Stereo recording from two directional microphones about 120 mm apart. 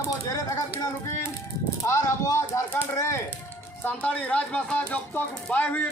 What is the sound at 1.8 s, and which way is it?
Speech, 25° left (ahead or behind).